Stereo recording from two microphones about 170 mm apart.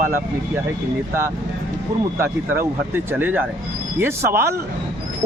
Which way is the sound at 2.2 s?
15° right (ahead or behind).